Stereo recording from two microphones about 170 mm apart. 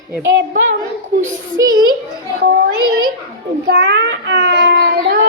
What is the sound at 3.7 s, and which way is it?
A child's voice, 90° right.